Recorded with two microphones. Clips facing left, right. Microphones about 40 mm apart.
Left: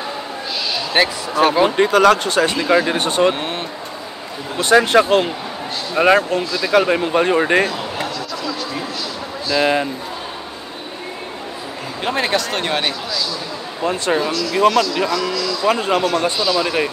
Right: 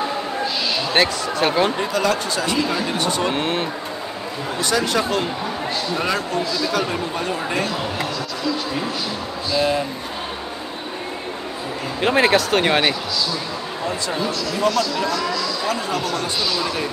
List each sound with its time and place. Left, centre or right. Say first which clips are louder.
0.9 s speech: left 3 dB; centre
1.8 s speech: left 8 dB; left
2.5 s speech: left 5 dB; left
3.3 s speech: right 3 dB; centre
4.6 s speech: left 8 dB; left
9.6 s speech: left 3 dB; left
12.0 s speech: right 3 dB; centre
13.8 s speech: left 6 dB; left